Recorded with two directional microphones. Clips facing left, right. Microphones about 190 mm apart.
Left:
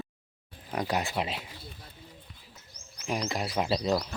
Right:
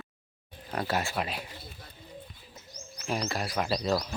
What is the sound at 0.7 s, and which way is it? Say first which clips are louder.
Speech: left 1 dB; 15° left (ahead or behind).